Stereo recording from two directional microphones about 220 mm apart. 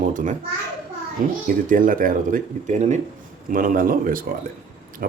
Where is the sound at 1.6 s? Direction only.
40° right (ahead or behind).